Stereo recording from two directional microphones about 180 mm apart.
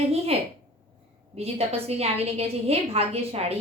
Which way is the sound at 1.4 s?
35° right (ahead or behind).